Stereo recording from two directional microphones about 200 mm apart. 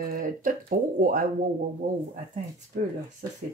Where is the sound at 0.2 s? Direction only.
40° right (ahead or behind).